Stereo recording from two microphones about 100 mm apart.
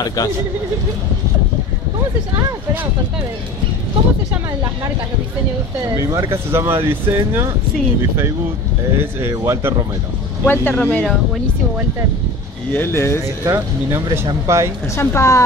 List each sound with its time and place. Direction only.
0.0 s speech: 40° left (ahead or behind)
5.9 s speech: 30° right (ahead or behind)
9.3 s speech: 30° right (ahead or behind)
10.4 s speech: 20° left (ahead or behind)
12.7 s speech: 25° left (ahead or behind)
13.4 s speech: 30° right (ahead or behind)
15.0 s speech: 30° left (ahead or behind)